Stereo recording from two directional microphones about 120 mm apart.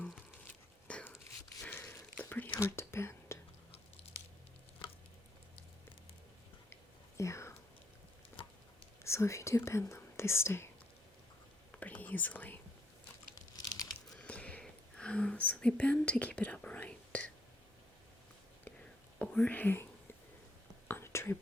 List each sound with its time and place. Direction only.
0.9 s whispering: 10° left (ahead or behind)
7.2 s whispering: 25° left (ahead or behind)
8.4 s a sound: 45° left (ahead or behind)
9.0 s speech: 25° left (ahead or behind)
11.7 s whispering: 15° left (ahead or behind)
13.3 s a sound: 30° left (ahead or behind)
14.1 s whispering: 10° left (ahead or behind)
19.2 s speech: 10° left (ahead or behind)
20.8 s whispering: 20° left (ahead or behind)